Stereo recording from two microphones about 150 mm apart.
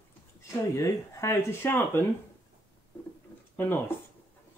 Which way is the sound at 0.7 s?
20° left (ahead or behind).